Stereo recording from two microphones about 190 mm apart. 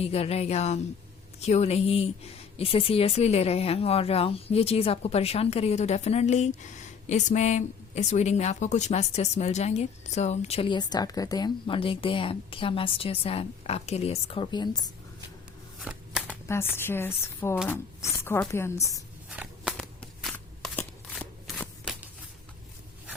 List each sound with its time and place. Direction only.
0.0 s speech: 30° left (ahead or behind)
15.8 s shuffling cards: 5° right (ahead or behind)
16.5 s speech: 10° left (ahead or behind)
19.3 s a sound: 5° right (ahead or behind)
20.2 s shuffling cards: 5° left (ahead or behind)